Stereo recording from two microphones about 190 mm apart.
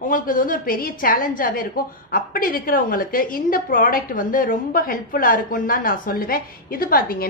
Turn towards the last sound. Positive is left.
turn(degrees=50)  # may be behind; listen again after turning